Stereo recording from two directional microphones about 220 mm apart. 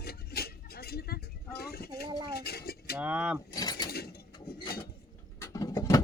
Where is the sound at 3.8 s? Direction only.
45° left (ahead or behind).